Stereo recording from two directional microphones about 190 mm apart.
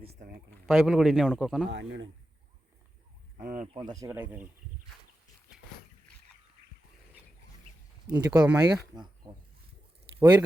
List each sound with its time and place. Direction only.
0.1 s speech: 55° right (ahead or behind)
0.7 s a man's voice: centre (ahead or behind)
1.7 s a man's voice: 70° right (ahead or behind)
3.4 s speech: 45° right (ahead or behind)
3.8 s speech: 20° right (ahead or behind)
8.2 s speech: 20° right (ahead or behind)
10.2 s speech: 10° right (ahead or behind)